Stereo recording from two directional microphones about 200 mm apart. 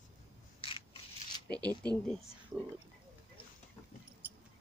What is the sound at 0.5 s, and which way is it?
Scissors, 25° left (ahead or behind).